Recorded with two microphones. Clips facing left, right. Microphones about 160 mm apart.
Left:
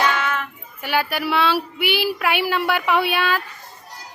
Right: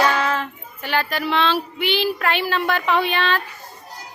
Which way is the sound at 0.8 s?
10° left (ahead or behind).